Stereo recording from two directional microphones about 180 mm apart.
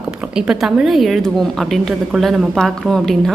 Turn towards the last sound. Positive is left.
turn(degrees=0)  # may be behind; listen again after turning